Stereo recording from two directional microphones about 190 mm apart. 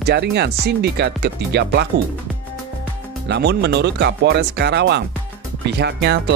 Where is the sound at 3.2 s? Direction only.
65° right (ahead or behind).